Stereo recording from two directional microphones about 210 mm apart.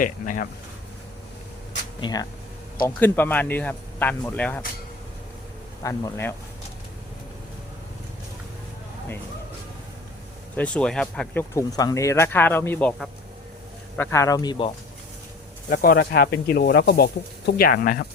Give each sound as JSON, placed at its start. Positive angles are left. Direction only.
{"t": 0.0, "sound": "speech", "side_deg": 40}
{"t": 2.0, "sound": "speech", "side_deg": 20}
{"t": 3.0, "sound": "speech", "side_deg": 10}
{"t": 5.8, "sound": "speech", "side_deg": 15}
{"t": 10.6, "sound": "speech", "side_deg": 5}
{"t": 13.9, "sound": "speech", "side_deg": 10}
{"t": 15.7, "sound": "speech", "side_deg": 45}